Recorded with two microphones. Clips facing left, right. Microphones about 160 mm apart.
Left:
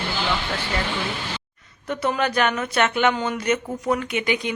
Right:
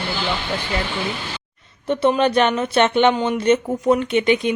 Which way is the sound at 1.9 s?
25° right (ahead or behind).